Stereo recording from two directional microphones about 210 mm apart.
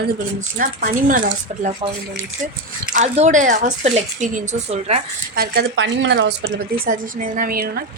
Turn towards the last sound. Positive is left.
turn(degrees=-45)  # may be behind; listen again after turning